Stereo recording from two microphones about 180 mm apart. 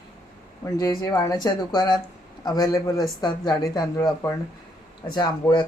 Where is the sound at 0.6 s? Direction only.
20° left (ahead or behind).